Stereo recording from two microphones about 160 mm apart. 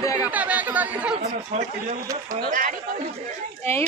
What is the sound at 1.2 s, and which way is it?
Speech, 45° right (ahead or behind).